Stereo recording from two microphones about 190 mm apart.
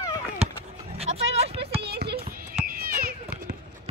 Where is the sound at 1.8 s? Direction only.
60° right (ahead or behind).